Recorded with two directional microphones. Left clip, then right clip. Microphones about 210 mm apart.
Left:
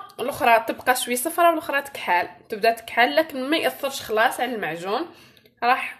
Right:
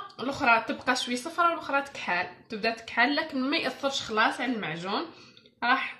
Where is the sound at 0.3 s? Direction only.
50° left (ahead or behind).